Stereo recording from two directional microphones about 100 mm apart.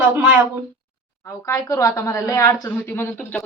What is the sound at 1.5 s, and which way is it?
Speech, 35° left (ahead or behind).